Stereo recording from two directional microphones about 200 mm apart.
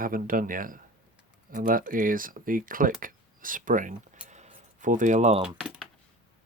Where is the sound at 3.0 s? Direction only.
45° right (ahead or behind).